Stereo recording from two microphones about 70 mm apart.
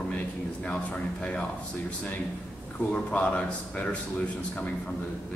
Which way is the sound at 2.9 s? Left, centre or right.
Centre.